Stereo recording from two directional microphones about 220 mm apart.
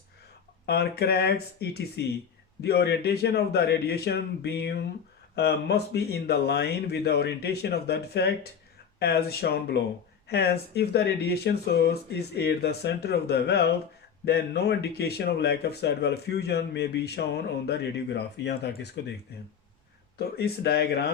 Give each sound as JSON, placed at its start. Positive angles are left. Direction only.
{"t": 0.6, "sound": "speech", "side_deg": 45}
{"t": 20.1, "sound": "speech", "side_deg": 45}